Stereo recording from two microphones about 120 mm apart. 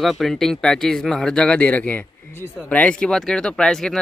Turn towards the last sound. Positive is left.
turn(degrees=5)  # may be behind; listen again after turning